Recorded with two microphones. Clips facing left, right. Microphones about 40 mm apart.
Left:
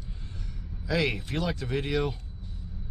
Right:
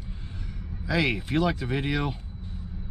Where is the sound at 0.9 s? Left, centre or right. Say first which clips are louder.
Right 3 dB; centre.